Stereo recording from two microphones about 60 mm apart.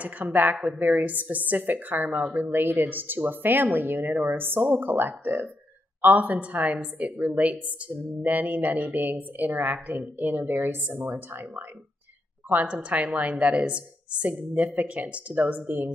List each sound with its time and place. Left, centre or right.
0.0 s a woman's voice: right
12.6 s a woman's voice: right